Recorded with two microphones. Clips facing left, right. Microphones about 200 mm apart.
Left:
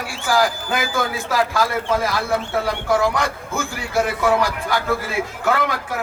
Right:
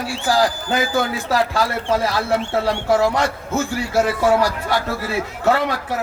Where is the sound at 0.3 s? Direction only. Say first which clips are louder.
Right 1 dB; 35° right (ahead or behind).